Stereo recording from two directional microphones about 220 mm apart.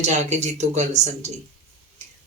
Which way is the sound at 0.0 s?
30° right (ahead or behind).